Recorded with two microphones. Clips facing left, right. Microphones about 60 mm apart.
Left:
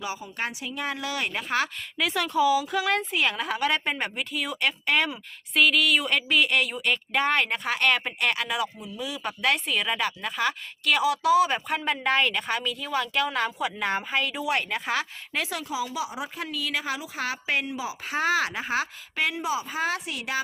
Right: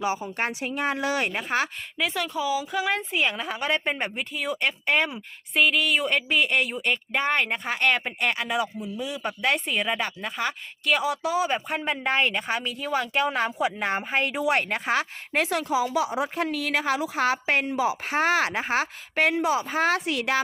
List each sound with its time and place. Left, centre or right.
0.0 s speech: right
1.4 s speech: centre
2.0 s a woman's voice: centre
8.8 s speech: centre
9.1 s a woman's voice: centre
11.9 s speech: centre; by 20.4 s right